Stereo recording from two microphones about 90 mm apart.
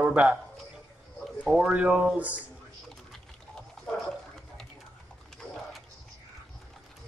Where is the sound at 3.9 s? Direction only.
5° left (ahead or behind).